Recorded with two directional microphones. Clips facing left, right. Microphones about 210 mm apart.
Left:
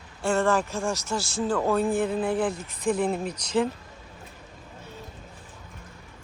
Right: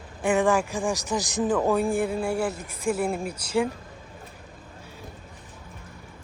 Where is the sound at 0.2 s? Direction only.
15° right (ahead or behind).